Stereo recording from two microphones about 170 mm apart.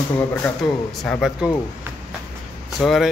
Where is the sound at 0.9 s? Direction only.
5° left (ahead or behind).